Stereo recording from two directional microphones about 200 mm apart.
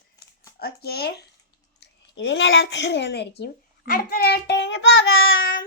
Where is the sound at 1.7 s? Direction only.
60° left (ahead or behind).